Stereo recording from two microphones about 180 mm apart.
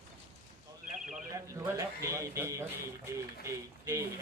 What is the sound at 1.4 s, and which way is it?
Speech, 15° right (ahead or behind).